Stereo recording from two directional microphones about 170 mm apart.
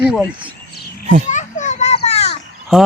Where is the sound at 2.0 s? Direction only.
40° left (ahead or behind).